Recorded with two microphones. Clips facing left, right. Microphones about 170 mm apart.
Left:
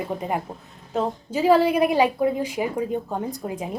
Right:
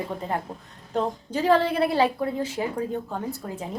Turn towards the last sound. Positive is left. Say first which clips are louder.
# left 3 dB
turn(degrees=15)  # may be behind; listen again after turning